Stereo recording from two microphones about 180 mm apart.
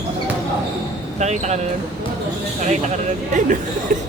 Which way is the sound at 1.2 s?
40° right (ahead or behind).